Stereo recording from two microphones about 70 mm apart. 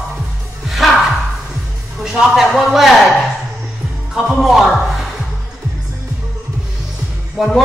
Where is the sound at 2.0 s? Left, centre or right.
Centre.